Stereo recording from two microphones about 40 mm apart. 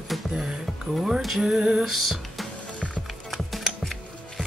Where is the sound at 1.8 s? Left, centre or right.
Centre.